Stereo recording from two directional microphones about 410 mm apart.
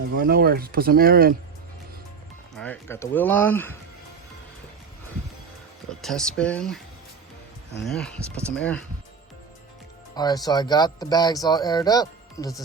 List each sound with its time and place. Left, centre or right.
0.2 s speech: right
2.6 s speech: centre
5.9 s speech: centre
7.9 s speech: centre
10.2 s speech: centre